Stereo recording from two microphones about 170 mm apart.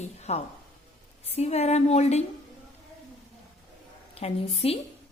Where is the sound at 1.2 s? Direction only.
40° left (ahead or behind).